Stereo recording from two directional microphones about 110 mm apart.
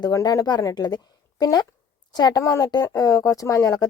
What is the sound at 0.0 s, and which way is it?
Speech, 35° left (ahead or behind).